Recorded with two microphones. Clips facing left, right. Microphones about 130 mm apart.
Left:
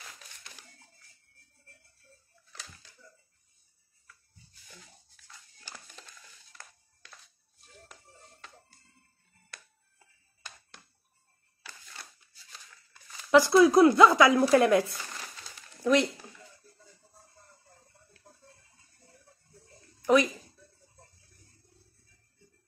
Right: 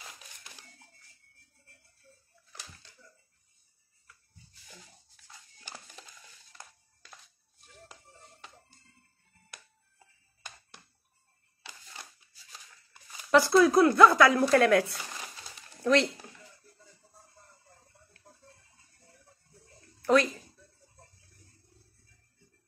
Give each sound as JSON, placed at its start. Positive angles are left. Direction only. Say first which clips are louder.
{"t": 6.6, "sound": "music", "louder": "right 2 dB", "side_deg": -15}
{"t": 13.3, "sound": "speech", "louder": "left 2 dB", "side_deg": 20}
{"t": 15.0, "sound": "crumpling", "louder": "even", "side_deg": -15}
{"t": 15.8, "sound": "speech", "louder": "even", "side_deg": 10}
{"t": 20.0, "sound": "a sound", "louder": "left 1 dB", "side_deg": 15}